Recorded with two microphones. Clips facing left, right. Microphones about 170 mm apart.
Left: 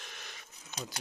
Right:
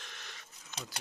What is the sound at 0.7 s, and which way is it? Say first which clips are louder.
Speech: left 3 dB; 15° left (ahead or behind).